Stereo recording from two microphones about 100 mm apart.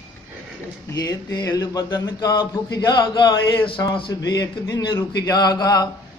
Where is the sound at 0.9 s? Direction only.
35° left (ahead or behind); by 3.8 s 55° left (ahead or behind).